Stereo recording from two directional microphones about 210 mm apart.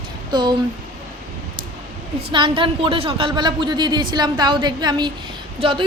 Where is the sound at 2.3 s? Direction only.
25° right (ahead or behind).